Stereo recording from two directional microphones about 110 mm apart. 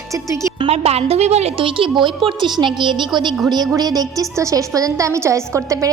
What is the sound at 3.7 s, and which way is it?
A woman's voice, 35° right (ahead or behind).